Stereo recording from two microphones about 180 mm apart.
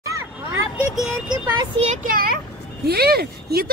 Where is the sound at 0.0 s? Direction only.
15° right (ahead or behind).